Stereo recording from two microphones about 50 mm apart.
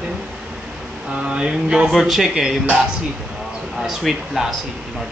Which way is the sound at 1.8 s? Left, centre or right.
Centre.